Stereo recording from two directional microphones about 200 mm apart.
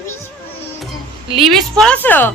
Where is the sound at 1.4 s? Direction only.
Centre (ahead or behind).